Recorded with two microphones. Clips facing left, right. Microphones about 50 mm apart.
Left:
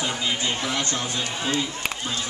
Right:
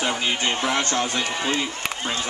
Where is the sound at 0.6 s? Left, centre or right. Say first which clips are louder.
Right 4 dB; right.